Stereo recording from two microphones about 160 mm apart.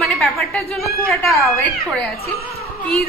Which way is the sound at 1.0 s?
20° left (ahead or behind).